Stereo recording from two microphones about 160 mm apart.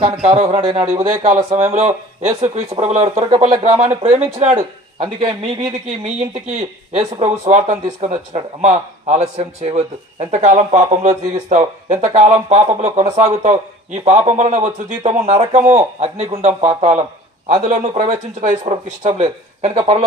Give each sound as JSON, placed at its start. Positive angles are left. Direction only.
{"t": 0.3, "sound": "speech", "side_deg": -35}
{"t": 0.7, "sound": "speech", "side_deg": -45}